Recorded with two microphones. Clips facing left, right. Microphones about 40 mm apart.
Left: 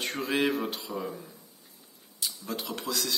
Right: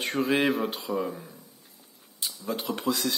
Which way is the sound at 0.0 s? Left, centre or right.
Centre.